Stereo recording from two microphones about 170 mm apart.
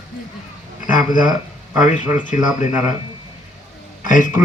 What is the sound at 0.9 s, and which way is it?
A man's voice, 50° left (ahead or behind).